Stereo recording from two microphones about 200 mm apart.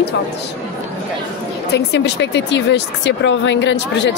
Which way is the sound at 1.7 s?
60° left (ahead or behind).